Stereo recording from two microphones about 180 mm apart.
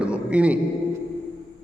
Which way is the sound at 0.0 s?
5° right (ahead or behind).